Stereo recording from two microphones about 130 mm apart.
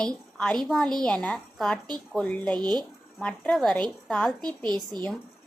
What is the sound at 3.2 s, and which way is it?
A woman's voice, 5° left (ahead or behind).